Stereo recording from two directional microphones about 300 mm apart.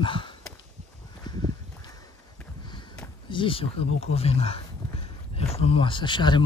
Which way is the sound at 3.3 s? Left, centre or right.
Centre.